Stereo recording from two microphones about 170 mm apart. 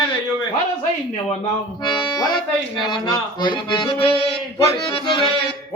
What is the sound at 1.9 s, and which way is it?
Accordion, 25° left (ahead or behind).